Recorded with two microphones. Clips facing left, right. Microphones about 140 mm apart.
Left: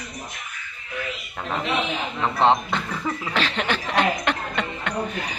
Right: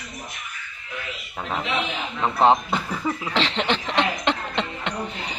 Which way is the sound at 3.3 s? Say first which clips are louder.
Right 1 dB; 20° right (ahead or behind).